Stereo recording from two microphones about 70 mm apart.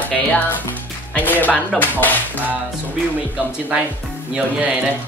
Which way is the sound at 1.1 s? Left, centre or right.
Left.